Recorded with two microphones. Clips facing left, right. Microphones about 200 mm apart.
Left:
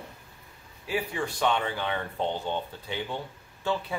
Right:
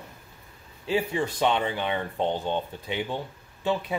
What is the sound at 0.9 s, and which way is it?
Speech, 25° right (ahead or behind).